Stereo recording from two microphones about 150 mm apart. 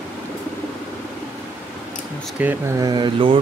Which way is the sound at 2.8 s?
30° right (ahead or behind).